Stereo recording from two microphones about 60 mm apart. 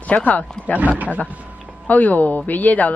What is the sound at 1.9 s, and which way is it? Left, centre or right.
Speech, left.